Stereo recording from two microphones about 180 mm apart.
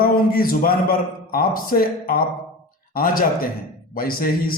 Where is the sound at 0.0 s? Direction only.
55° left (ahead or behind).